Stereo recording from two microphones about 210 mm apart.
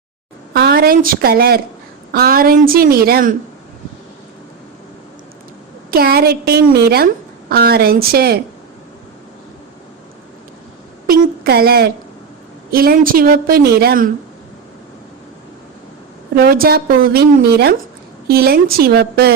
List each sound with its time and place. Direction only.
0.5 s a woman's voice: 45° right (ahead or behind)
5.9 s a woman's voice: 45° right (ahead or behind)
11.0 s a woman's voice: 45° right (ahead or behind)
16.3 s a woman's voice: 45° right (ahead or behind)